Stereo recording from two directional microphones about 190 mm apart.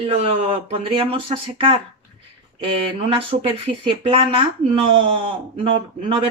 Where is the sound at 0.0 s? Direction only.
30° right (ahead or behind).